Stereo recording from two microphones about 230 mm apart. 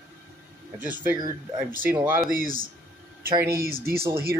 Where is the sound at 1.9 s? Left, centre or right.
Centre.